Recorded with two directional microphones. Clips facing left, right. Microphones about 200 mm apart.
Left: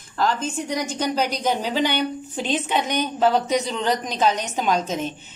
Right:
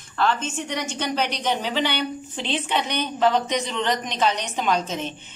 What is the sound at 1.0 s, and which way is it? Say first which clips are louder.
Speech: left 3 dB; 10° left (ahead or behind).